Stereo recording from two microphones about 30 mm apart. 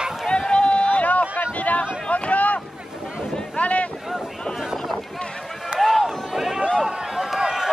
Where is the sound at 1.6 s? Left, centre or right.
Left.